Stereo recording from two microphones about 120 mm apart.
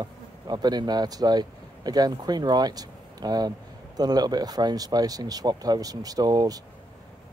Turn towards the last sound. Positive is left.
turn(degrees=-30)  # may be behind; listen again after turning